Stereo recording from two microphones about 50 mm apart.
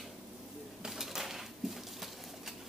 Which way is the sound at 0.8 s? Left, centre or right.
Centre.